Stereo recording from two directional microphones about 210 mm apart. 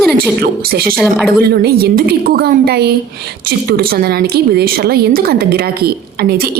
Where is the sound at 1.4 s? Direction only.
50° right (ahead or behind).